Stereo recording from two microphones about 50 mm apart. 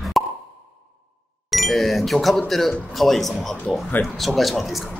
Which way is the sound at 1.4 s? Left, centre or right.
Centre.